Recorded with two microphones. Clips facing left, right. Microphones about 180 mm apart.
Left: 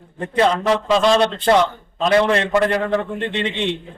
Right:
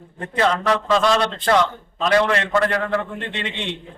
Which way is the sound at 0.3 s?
25° left (ahead or behind).